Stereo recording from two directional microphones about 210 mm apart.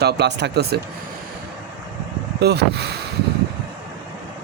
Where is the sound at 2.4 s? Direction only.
50° right (ahead or behind).